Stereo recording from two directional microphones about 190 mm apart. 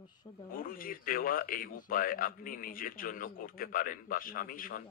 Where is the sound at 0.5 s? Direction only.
50° left (ahead or behind).